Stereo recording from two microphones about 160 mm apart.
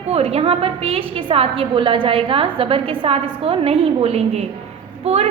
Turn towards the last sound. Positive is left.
turn(degrees=-40)  # may be behind; listen again after turning